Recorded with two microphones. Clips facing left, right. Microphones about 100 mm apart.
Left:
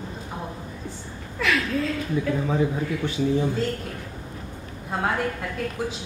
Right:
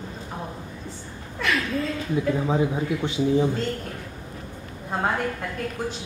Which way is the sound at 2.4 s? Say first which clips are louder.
Right 1 dB; 20° right (ahead or behind).